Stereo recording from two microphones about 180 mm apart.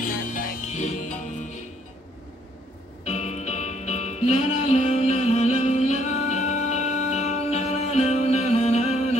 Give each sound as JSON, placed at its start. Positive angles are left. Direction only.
{"t": 0.0, "sound": "music", "side_deg": 50}
{"t": 3.1, "sound": "music", "side_deg": 40}